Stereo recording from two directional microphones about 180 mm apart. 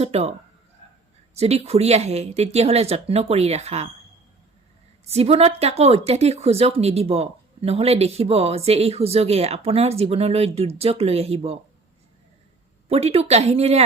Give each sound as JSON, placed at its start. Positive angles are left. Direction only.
{"t": 0.0, "sound": "speech", "side_deg": -35}
{"t": 1.4, "sound": "speech", "side_deg": -35}
{"t": 5.0, "sound": "speech", "side_deg": -35}
{"t": 12.9, "sound": "speech", "side_deg": -35}